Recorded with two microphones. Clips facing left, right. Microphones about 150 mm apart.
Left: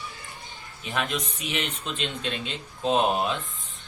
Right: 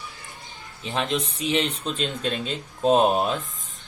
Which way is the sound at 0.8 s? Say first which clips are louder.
Right 3 dB; 30° right (ahead or behind).